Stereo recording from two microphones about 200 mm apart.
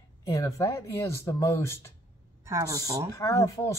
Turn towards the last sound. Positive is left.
turn(degrees=15)  # may be behind; listen again after turning